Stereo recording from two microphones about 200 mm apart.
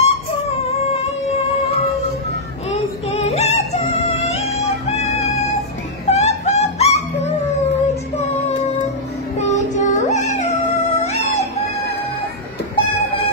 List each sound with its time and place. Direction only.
0.0 s a sound: 30° left (ahead or behind)
2.7 s music: 35° left (ahead or behind)
6.0 s dog: 35° left (ahead or behind)
9.4 s music: 35° left (ahead or behind)